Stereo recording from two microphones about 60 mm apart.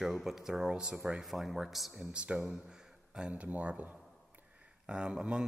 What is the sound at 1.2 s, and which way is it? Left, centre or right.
Speech, centre.